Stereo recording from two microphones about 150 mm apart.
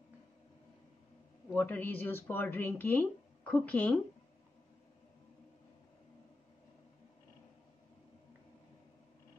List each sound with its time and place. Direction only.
1.5 s speech: 10° left (ahead or behind)